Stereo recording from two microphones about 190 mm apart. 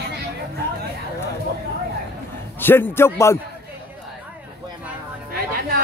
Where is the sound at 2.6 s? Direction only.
10° left (ahead or behind).